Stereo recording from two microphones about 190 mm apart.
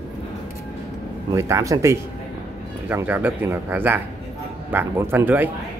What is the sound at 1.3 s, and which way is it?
Speech, 15° right (ahead or behind).